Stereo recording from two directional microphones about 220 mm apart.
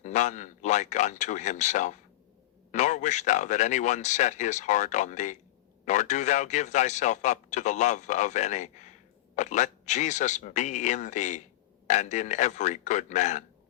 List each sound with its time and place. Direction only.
0.0 s a man's voice: 35° left (ahead or behind)